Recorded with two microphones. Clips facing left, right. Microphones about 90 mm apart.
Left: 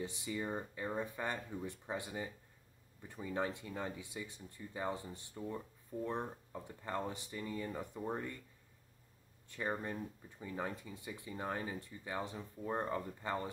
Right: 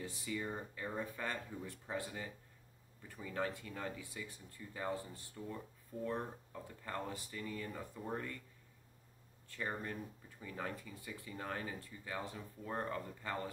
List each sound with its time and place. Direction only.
0.0 s speech: 20° left (ahead or behind)
9.5 s speech: 20° left (ahead or behind)